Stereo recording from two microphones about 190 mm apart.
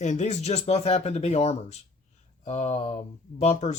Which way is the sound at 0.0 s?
40° left (ahead or behind).